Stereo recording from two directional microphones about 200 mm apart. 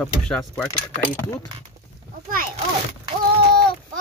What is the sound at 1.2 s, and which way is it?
Speech, 15° left (ahead or behind).